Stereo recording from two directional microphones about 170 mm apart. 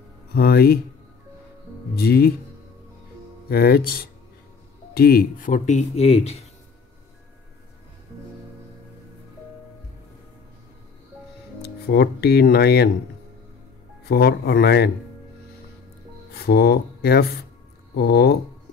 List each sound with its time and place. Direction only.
0.3 s speech: 65° left (ahead or behind)
2.0 s speech: 65° left (ahead or behind)
3.4 s speech: 65° left (ahead or behind); by 6.4 s 35° left (ahead or behind)
11.6 s speech: 70° left (ahead or behind)
14.0 s speech: 70° left (ahead or behind)
16.3 s speech: 65° left (ahead or behind)